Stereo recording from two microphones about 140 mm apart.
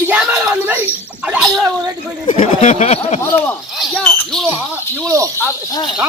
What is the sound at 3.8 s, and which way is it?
Speech, 5° left (ahead or behind).